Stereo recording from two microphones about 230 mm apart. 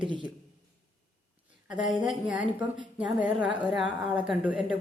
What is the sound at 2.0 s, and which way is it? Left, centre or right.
A woman's voice, centre.